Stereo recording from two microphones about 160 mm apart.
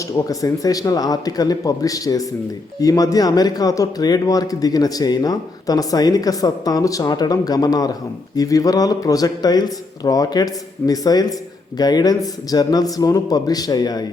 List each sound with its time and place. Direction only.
0.3 s speech: 20° left (ahead or behind)